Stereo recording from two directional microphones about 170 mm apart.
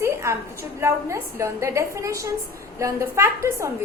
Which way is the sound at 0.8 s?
15° right (ahead or behind).